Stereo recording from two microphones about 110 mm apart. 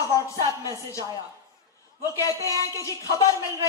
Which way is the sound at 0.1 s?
35° left (ahead or behind).